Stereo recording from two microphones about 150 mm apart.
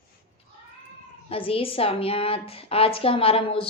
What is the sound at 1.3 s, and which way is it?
A woman's voice, 40° left (ahead or behind).